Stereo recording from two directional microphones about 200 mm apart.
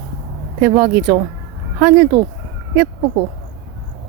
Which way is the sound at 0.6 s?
10° right (ahead or behind).